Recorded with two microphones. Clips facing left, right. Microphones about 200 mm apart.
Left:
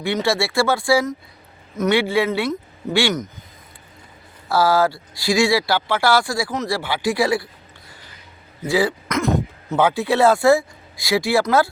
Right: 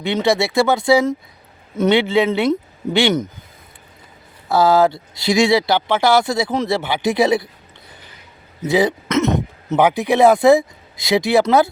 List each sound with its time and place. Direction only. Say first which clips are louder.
0.0 s speech: right 3 dB; 20° right (ahead or behind)
4.4 s speech: right 3 dB; 20° right (ahead or behind)
8.6 s speech: right 3 dB; 20° right (ahead or behind)